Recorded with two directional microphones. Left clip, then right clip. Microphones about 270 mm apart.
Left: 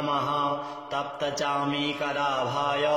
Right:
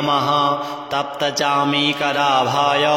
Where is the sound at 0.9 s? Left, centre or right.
Right.